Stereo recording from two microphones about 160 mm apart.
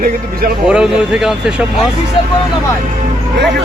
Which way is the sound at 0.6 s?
5° right (ahead or behind).